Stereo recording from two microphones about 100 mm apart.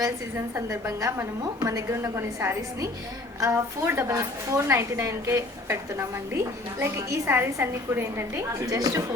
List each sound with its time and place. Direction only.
0.3 s a woman's voice: 30° right (ahead or behind)